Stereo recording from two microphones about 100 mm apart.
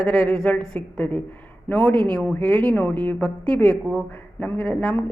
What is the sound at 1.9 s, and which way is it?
Speech, 50° right (ahead or behind).